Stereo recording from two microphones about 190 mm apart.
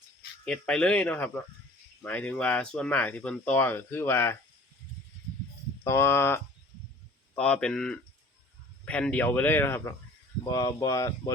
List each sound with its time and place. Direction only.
0.4 s speech: 5° left (ahead or behind)
5.8 s speech: 15° left (ahead or behind)